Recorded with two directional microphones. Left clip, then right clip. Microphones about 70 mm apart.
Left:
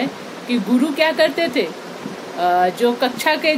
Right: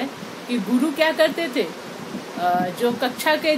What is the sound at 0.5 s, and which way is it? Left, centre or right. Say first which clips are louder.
Speech: left 4 dB; left.